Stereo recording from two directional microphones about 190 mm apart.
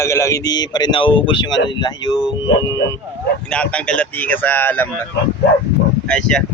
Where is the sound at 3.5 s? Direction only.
5° left (ahead or behind).